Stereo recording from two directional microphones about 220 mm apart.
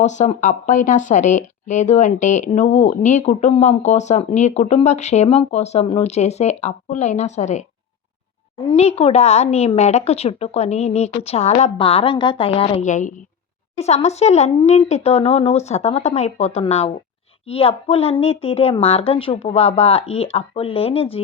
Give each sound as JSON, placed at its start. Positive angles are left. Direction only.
{"t": 0.0, "sound": "a woman's voice", "side_deg": 30}